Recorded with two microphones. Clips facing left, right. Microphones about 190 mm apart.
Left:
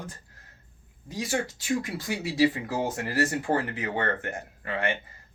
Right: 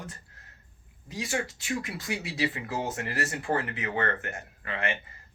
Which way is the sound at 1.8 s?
35° left (ahead or behind).